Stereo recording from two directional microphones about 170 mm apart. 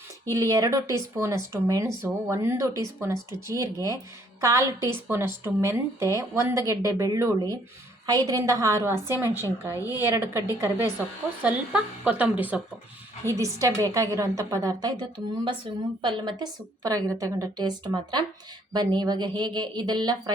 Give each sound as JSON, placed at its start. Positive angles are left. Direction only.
{"t": 0.3, "sound": "a woman's voice", "side_deg": -20}
{"t": 9.7, "sound": "speech", "side_deg": 20}
{"t": 10.0, "sound": "a woman's voice", "side_deg": -15}
{"t": 11.4, "sound": "a woman's voice", "side_deg": -10}
{"t": 13.4, "sound": "speech", "side_deg": -20}